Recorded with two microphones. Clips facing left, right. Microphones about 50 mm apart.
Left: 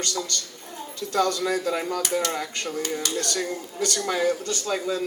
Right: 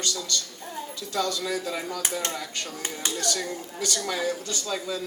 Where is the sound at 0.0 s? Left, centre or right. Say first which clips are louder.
Left 1 dB; left.